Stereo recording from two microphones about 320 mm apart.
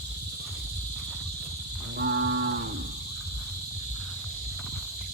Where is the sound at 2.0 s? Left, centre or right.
Right.